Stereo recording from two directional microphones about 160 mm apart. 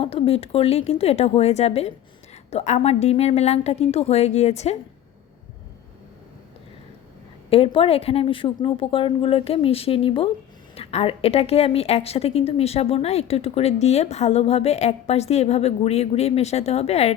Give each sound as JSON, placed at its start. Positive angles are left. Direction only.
{"t": 0.0, "sound": "a woman's voice", "side_deg": 35}
{"t": 7.5, "sound": "a woman's voice", "side_deg": 35}